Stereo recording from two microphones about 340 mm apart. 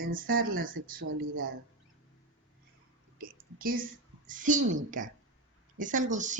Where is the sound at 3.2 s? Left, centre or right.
Right.